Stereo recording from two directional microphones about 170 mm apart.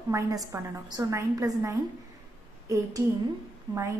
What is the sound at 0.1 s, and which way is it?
A woman's voice, 20° right (ahead or behind).